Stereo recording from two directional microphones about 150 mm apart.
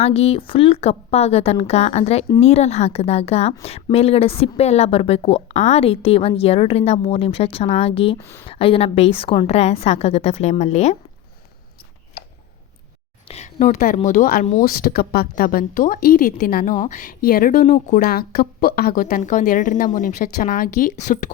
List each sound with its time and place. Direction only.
0.0 s a woman's voice: 40° left (ahead or behind)
8.2 s speech: 20° left (ahead or behind)
8.4 s a woman's voice: 40° left (ahead or behind)
12.2 s a sound: 90° left
13.2 s a woman's voice: 45° left (ahead or behind); by 14.4 s 75° left (ahead or behind)
14.6 s speech: 90° left
16.9 s a woman's voice: 60° left (ahead or behind)